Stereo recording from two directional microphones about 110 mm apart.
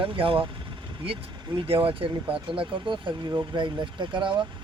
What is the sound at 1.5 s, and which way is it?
Speech, 55° right (ahead or behind).